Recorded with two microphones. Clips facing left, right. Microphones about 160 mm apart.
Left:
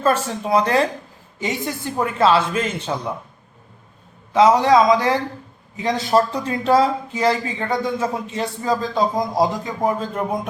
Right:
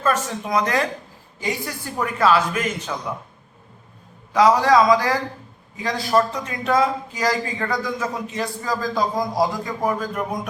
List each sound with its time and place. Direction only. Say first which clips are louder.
0.0 s speech: left 3 dB; 30° left (ahead or behind)
4.3 s speech: left 2 dB; 25° left (ahead or behind)